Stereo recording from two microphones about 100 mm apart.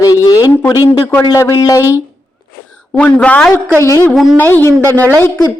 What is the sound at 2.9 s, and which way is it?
A man's voice, 15° left (ahead or behind).